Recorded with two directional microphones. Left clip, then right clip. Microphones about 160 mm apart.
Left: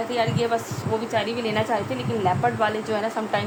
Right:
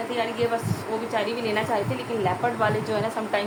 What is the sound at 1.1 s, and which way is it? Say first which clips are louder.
Speech: right 1 dB; 45° left (ahead or behind).